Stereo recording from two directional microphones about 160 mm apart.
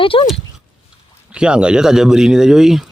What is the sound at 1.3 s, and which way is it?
Speech, 5° right (ahead or behind).